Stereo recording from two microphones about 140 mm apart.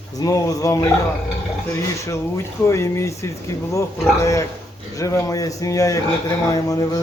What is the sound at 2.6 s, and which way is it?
A man's voice, 20° left (ahead or behind).